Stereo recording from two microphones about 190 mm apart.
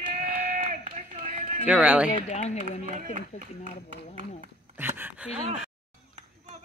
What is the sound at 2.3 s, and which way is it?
A man's voice, 35° left (ahead or behind).